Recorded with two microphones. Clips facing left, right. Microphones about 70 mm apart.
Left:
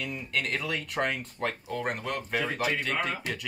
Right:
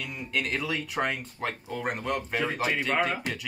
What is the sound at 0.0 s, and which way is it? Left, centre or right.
Speech, centre.